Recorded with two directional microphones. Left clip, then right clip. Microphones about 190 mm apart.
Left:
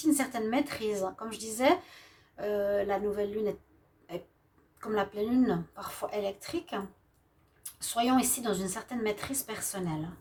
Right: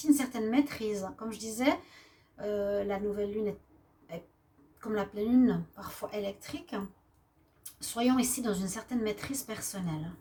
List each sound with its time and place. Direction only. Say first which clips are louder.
0.3 s speech: even; 45° left (ahead or behind)
4.8 s a woman's voice: left 2 dB; 40° left (ahead or behind)